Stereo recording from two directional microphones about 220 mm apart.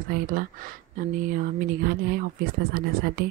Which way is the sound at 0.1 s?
40° right (ahead or behind).